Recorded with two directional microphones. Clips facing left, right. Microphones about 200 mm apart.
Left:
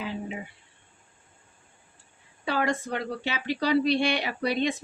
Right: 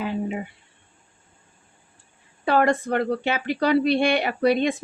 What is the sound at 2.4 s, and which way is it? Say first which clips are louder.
Speech: right 7 dB; 55° right (ahead or behind).